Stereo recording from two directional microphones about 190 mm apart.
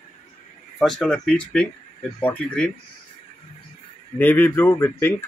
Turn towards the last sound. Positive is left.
turn(degrees=15)  # may be behind; listen again after turning